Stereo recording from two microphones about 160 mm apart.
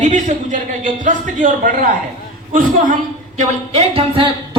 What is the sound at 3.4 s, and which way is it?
A man's voice, 40° right (ahead or behind).